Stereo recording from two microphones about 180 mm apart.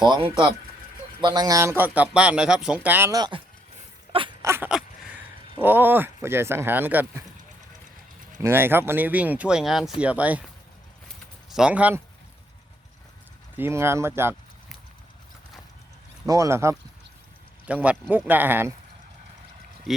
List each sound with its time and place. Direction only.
0.0 s speech: 25° right (ahead or behind)
4.1 s a sound: 30° right (ahead or behind)
4.4 s speech: 10° right (ahead or behind)
8.4 s speech: 15° right (ahead or behind)
11.5 s speech: 5° right (ahead or behind)
13.6 s speech: 15° right (ahead or behind)
16.2 s speech: 20° right (ahead or behind)
19.9 s speech: centre (ahead or behind)